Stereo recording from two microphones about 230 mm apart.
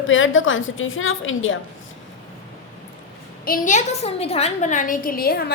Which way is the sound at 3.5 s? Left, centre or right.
Left.